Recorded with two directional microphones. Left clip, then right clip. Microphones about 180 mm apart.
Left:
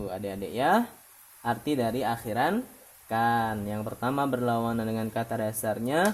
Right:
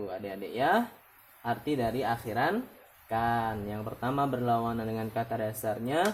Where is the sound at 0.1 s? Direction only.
60° left (ahead or behind).